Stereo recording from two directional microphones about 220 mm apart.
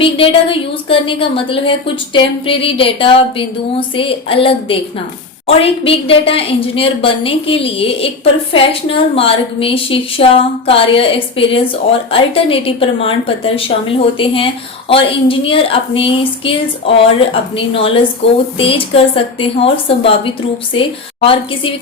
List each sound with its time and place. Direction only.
0.0 s a woman's voice: 25° left (ahead or behind)